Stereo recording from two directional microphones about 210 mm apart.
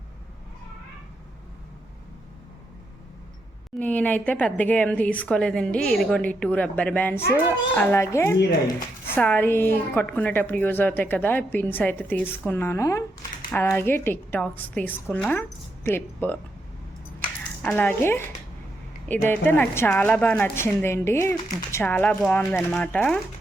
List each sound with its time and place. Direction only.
3.8 s a woman's voice: 5° left (ahead or behind)
17.6 s a woman's voice: 5° left (ahead or behind)